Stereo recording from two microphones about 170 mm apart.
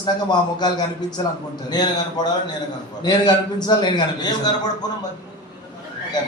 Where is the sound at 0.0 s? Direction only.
25° left (ahead or behind).